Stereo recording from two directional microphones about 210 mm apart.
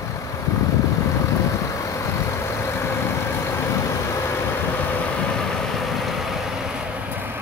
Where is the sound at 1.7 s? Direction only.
15° left (ahead or behind).